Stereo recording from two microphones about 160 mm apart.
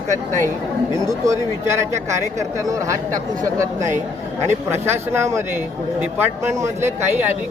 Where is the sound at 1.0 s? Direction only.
20° right (ahead or behind).